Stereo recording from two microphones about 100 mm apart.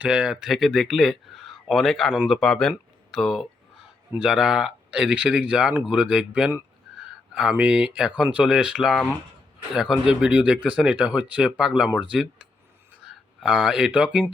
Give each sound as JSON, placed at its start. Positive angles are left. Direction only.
{"t": 0.0, "sound": "speech", "side_deg": -10}
{"t": 7.5, "sound": "speech", "side_deg": -10}